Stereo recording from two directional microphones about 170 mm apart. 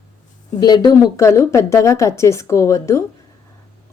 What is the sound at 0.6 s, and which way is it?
A woman's voice, 20° left (ahead or behind).